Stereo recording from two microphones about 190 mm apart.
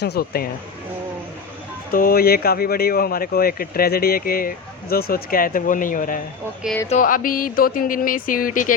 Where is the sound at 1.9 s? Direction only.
50° left (ahead or behind).